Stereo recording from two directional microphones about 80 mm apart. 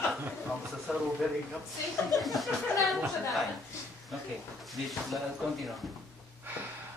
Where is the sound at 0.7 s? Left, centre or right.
Centre.